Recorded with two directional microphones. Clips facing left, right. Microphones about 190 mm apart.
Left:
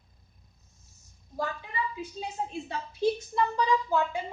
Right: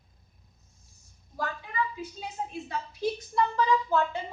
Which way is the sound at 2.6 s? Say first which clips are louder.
Left 4 dB; 25° left (ahead or behind).